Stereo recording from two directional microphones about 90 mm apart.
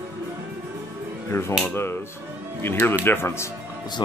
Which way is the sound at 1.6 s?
25° left (ahead or behind).